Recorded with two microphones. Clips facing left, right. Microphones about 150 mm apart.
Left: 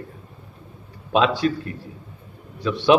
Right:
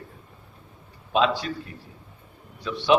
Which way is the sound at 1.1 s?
75° left (ahead or behind).